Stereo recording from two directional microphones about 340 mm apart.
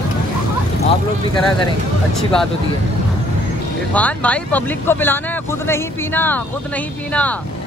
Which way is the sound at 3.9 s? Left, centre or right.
Centre.